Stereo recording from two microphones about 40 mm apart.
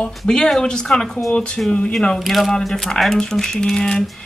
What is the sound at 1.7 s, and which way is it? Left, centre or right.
Speech, left.